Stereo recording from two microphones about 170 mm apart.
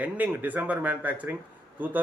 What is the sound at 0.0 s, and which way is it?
Speech, 10° right (ahead or behind).